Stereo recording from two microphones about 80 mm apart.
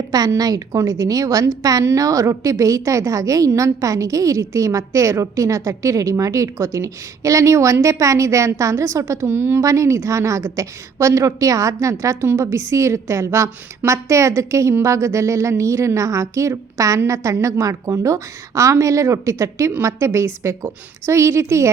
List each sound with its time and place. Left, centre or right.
0.1 s a woman's voice: right
9.2 s a woman's voice: right
9.6 s a woman's voice: right